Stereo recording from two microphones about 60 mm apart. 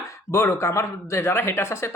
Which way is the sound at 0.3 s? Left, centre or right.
Left.